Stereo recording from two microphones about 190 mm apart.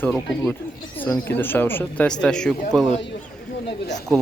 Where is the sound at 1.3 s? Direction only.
10° left (ahead or behind).